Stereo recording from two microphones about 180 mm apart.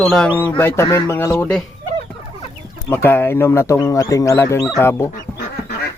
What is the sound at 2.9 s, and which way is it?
Speech, 10° left (ahead or behind).